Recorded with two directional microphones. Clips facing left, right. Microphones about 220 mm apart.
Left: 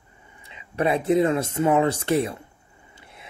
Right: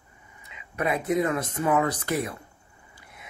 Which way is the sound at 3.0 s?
25° left (ahead or behind).